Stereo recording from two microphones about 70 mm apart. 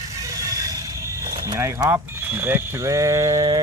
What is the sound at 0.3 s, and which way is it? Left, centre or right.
Vehicle, right.